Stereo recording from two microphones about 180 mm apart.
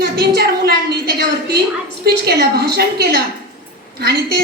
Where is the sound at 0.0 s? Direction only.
60° right (ahead or behind).